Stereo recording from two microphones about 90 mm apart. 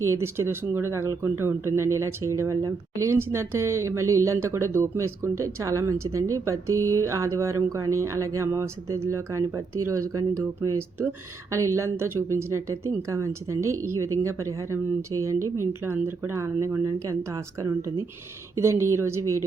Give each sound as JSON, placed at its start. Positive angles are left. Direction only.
{"t": 0.0, "sound": "speech", "side_deg": -30}